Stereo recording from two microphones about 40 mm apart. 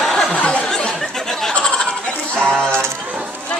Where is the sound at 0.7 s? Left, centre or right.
Centre.